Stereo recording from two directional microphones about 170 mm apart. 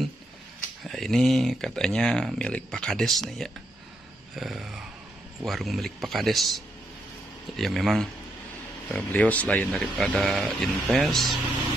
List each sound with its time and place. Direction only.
0.8 s speech: centre (ahead or behind)
7.5 s speech: centre (ahead or behind)